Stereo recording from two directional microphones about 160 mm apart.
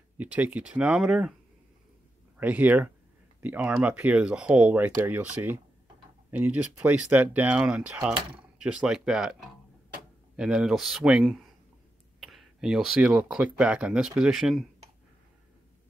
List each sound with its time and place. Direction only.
0.2 s speech: 10° right (ahead or behind)
2.3 s speech: 10° right (ahead or behind)